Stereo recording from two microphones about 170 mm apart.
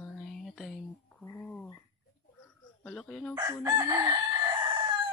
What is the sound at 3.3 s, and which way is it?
Chicken, 20° right (ahead or behind).